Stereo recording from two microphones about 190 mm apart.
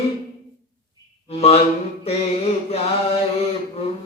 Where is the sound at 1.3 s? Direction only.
30° left (ahead or behind).